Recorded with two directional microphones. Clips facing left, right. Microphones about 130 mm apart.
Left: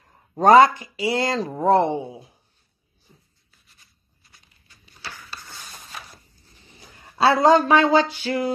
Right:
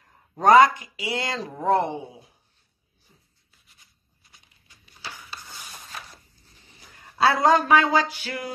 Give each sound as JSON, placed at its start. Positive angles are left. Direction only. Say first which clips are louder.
{"t": 0.3, "sound": "speech", "louder": "left 2 dB", "side_deg": 30}
{"t": 3.8, "sound": "a sound", "louder": "left 1 dB", "side_deg": -15}
{"t": 6.8, "sound": "speech", "louder": "left 2 dB", "side_deg": 25}